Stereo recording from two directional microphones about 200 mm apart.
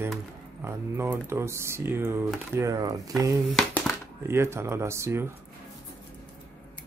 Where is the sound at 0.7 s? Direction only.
10° right (ahead or behind).